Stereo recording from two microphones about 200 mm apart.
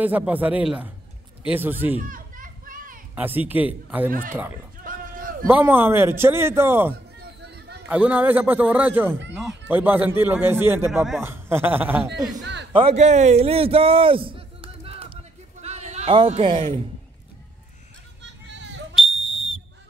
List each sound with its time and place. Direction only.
0.0 s a man's voice: 10° right (ahead or behind)
2.0 s children playing: 45° right (ahead or behind)
3.2 s a man's voice: 10° right (ahead or behind)
4.8 s a sound: 45° right (ahead or behind)
5.5 s a man's voice: 10° right (ahead or behind)
7.2 s a sound: 55° right (ahead or behind)
7.9 s a man's voice: 5° right (ahead or behind)
12.7 s a man's voice: 30° right (ahead or behind)
18.2 s children playing: 65° right (ahead or behind)